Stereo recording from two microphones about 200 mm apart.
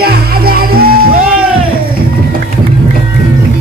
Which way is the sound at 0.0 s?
50° right (ahead or behind).